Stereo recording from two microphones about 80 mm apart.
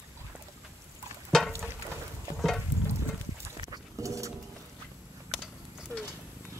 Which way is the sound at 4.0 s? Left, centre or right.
Right.